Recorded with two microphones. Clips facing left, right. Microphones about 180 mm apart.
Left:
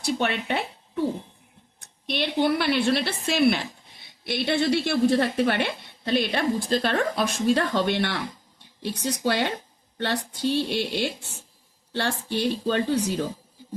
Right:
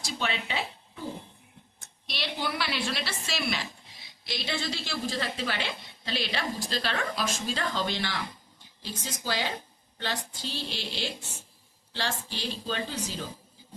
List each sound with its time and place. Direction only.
0.0 s a woman's voice: 60° left (ahead or behind)